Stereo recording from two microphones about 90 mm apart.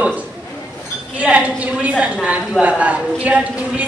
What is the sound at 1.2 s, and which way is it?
A woman's voice, 15° right (ahead or behind).